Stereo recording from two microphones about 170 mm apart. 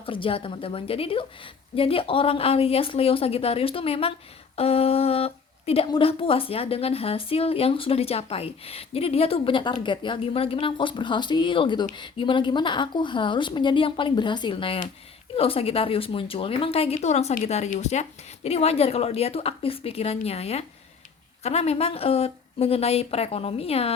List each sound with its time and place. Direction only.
0.0 s a woman's voice: 30° left (ahead or behind)